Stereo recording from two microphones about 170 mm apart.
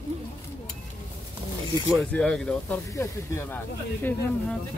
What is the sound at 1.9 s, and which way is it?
Speech, 5° left (ahead or behind).